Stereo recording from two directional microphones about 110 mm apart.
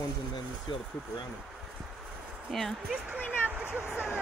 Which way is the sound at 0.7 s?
40° left (ahead or behind).